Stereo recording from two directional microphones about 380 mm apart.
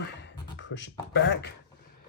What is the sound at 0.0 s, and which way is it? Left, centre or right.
Beatboxing, left.